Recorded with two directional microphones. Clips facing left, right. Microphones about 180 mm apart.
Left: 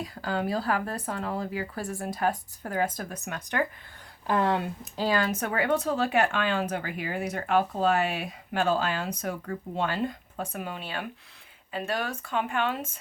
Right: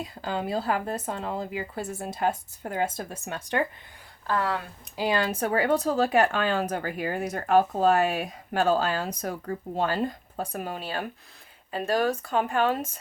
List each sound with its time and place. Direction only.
0.0 s speech: 20° right (ahead or behind)
4.3 s speech: 20° left (ahead or behind)
5.1 s speech: 30° right (ahead or behind)